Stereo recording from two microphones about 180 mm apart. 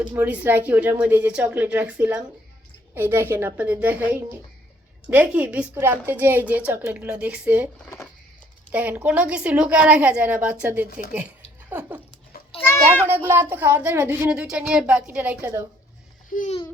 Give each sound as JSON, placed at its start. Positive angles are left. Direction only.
{"t": 0.0, "sound": "a woman's voice", "side_deg": -10}
{"t": 8.7, "sound": "a woman's voice", "side_deg": -10}
{"t": 11.7, "sound": "a sound", "side_deg": -10}
{"t": 12.5, "sound": "a sound", "side_deg": 10}
{"t": 13.1, "sound": "a woman's voice", "side_deg": -10}
{"t": 16.3, "sound": "speech", "side_deg": 45}